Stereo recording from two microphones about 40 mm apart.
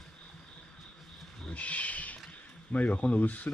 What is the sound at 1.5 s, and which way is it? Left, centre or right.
Speech, left.